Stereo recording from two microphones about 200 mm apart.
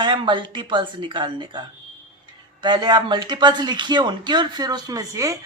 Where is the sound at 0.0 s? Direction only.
25° right (ahead or behind).